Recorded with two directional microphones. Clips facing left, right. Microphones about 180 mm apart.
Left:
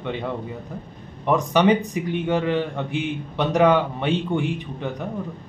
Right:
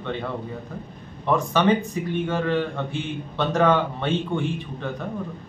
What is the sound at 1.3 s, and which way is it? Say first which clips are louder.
A man's voice: left 2 dB; 15° left (ahead or behind).